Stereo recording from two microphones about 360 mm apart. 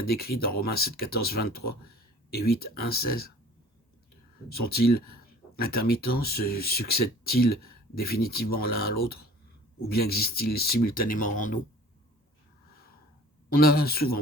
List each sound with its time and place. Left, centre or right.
0.0 s speech: left
4.5 s speech: left
13.5 s speech: left